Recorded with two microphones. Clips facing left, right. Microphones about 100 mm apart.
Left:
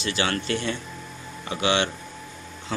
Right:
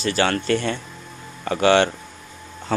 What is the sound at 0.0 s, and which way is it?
Speech, 45° right (ahead or behind).